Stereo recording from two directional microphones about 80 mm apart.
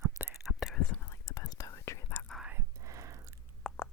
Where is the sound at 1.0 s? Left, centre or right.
Left.